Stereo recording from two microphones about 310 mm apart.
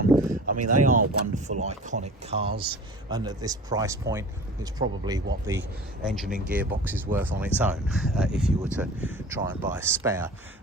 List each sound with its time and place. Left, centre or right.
0.1 s a sound: centre
0.5 s speech: right
0.9 s speech: right; by 10.3 s centre